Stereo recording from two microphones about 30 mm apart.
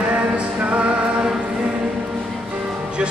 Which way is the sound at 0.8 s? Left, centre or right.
Right.